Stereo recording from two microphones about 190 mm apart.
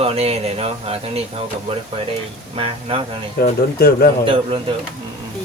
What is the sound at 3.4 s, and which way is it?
Speech, 55° left (ahead or behind).